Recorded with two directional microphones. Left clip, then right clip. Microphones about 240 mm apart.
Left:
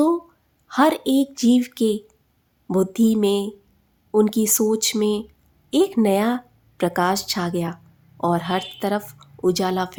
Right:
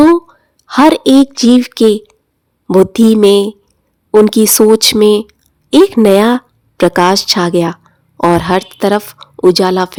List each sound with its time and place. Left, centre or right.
0.7 s a woman's voice: right